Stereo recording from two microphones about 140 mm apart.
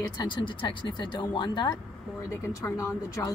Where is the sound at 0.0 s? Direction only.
35° left (ahead or behind).